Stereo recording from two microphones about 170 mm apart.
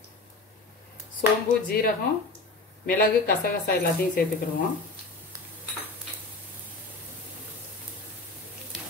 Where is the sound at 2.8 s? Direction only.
60° left (ahead or behind).